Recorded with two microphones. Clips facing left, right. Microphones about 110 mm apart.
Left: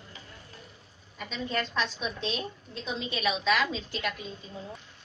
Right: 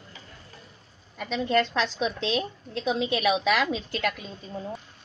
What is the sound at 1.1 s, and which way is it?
A woman's voice, 60° right (ahead or behind).